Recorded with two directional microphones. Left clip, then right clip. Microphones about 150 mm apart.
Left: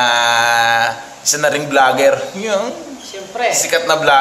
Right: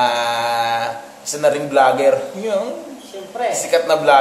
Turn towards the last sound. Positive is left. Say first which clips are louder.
# left 1 dB
turn(degrees=0)  # may be behind; listen again after turning